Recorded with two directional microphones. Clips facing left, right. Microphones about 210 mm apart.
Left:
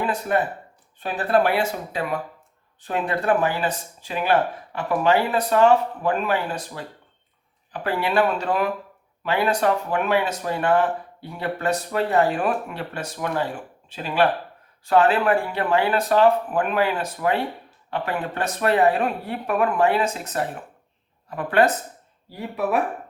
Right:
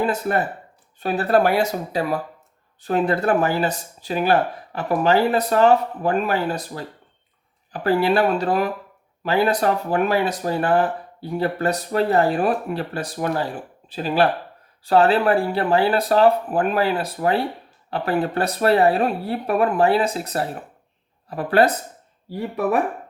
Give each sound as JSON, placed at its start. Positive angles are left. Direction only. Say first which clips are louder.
{"t": 0.0, "sound": "speech", "louder": "right 2 dB", "side_deg": -40}